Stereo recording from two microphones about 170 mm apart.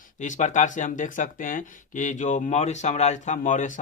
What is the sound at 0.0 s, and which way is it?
Speech, 45° left (ahead or behind).